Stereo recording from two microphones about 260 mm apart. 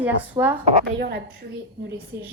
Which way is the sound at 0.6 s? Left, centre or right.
Right.